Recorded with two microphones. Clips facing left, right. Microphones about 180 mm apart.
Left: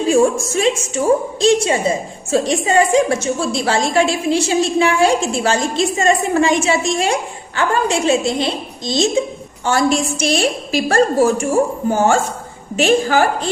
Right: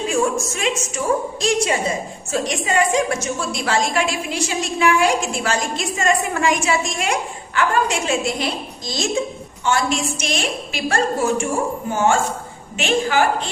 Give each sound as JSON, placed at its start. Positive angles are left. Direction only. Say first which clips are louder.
{"t": 0.1, "sound": "a woman's voice", "louder": "left 8 dB", "side_deg": 30}
{"t": 9.6, "sound": "a woman's voice", "louder": "left 4 dB", "side_deg": 35}